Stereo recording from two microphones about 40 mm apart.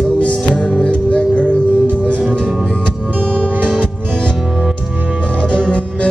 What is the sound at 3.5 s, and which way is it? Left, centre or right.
Music, right.